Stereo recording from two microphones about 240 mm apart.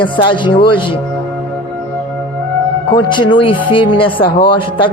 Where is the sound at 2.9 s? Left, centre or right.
Centre.